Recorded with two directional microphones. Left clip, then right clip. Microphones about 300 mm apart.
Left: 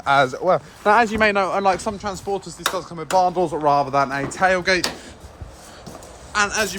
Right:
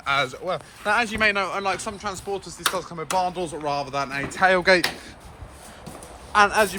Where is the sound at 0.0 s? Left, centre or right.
Centre.